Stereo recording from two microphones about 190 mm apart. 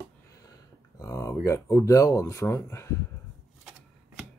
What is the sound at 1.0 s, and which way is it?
Speech, 15° left (ahead or behind).